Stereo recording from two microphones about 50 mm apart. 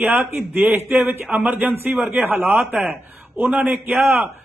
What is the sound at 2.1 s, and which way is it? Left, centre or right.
Speech, right.